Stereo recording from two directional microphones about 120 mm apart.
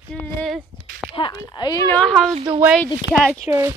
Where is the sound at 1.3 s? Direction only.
35° left (ahead or behind).